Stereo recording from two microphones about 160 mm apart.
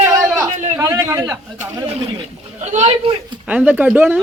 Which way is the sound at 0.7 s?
20° right (ahead or behind).